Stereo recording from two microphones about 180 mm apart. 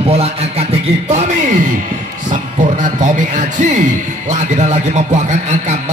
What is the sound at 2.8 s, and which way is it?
A man's voice, 45° right (ahead or behind).